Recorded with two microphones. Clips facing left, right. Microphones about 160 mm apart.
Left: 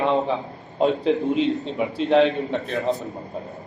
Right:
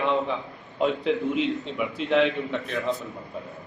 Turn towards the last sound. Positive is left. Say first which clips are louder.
# left 4 dB
turn(degrees=35)  # may be behind; listen again after turning